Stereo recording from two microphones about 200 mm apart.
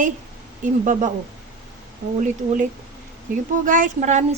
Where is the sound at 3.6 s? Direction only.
40° right (ahead or behind).